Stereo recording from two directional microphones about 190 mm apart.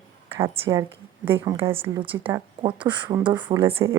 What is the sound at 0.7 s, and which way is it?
Speech, 15° right (ahead or behind).